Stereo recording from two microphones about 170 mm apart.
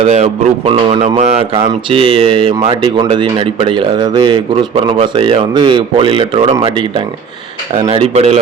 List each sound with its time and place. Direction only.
0.0 s speech: 40° right (ahead or behind)